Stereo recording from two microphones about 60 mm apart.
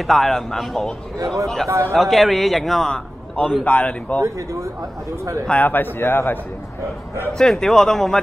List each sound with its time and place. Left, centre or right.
0.0 s a man's voice: centre
1.7 s speech: right
2.0 s a man's voice: centre
2.9 s a man's voice: centre
4.2 s speech: right
5.5 s speech: left
7.3 s a man's voice: centre